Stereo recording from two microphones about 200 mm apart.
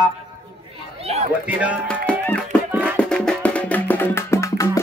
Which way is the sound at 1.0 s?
30° right (ahead or behind).